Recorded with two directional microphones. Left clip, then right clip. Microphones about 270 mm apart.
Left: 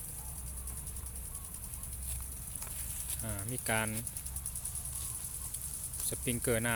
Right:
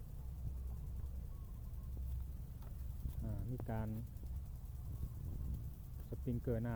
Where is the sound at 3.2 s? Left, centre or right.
Centre.